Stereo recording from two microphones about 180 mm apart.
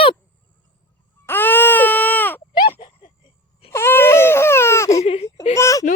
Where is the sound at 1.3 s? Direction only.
10° left (ahead or behind).